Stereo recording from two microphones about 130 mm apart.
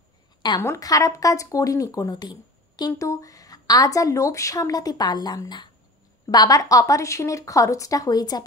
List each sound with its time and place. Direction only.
0.6 s speech: 25° left (ahead or behind)